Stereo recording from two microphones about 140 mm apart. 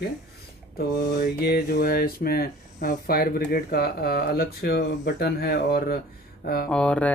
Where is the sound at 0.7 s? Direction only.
90° left.